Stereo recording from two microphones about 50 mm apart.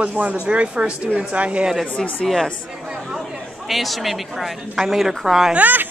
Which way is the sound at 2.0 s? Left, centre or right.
Centre.